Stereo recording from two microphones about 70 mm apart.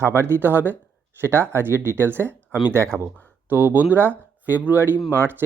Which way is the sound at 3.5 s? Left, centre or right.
Right.